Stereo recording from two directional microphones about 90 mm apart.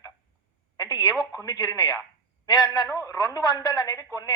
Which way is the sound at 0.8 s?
50° left (ahead or behind).